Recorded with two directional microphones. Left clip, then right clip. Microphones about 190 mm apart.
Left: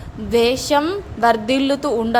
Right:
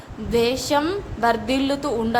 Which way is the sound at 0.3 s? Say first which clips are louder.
Left 4 dB; 25° left (ahead or behind).